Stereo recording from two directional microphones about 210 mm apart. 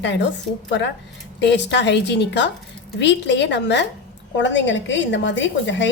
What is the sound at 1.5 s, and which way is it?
A woman's voice, 55° left (ahead or behind).